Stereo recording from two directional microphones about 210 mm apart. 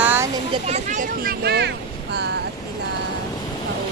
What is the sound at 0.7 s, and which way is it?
Speech, 35° right (ahead or behind).